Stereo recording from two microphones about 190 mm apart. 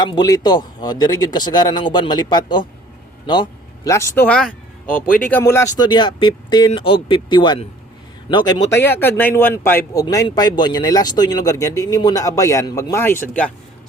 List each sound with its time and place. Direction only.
0.0 s speech: 20° left (ahead or behind)